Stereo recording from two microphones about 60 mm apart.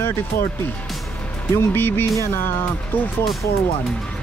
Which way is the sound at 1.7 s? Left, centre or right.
Left.